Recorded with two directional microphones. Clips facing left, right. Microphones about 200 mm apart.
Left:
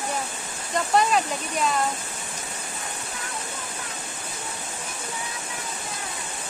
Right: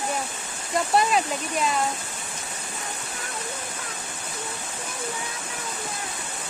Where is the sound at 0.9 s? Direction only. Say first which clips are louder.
Left 1 dB; centre (ahead or behind).